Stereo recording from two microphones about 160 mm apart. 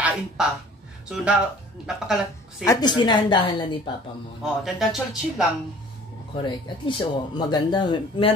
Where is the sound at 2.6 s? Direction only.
25° left (ahead or behind).